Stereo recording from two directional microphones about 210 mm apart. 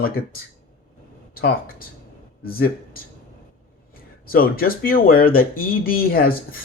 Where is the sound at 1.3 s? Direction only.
45° left (ahead or behind).